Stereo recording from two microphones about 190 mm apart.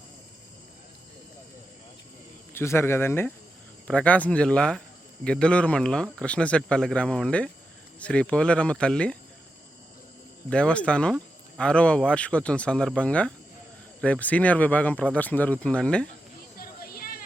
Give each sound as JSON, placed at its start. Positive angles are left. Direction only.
{"t": 2.5, "sound": "speech", "side_deg": 15}
{"t": 10.5, "sound": "speech", "side_deg": 5}
{"t": 16.6, "sound": "a sound", "side_deg": 50}